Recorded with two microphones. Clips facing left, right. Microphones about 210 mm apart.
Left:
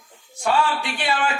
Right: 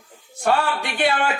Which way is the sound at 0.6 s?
55° right (ahead or behind).